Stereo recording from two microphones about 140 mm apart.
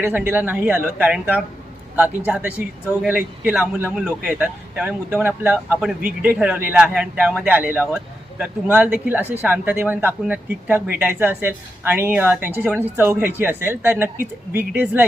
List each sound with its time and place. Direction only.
0.2 s a man's voice: 15° right (ahead or behind)